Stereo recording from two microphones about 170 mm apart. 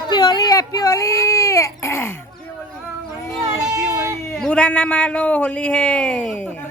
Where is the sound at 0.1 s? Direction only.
25° left (ahead or behind).